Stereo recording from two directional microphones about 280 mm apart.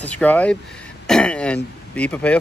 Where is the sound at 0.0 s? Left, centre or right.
Centre.